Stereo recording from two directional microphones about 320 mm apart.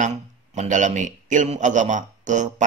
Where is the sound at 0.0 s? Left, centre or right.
Right.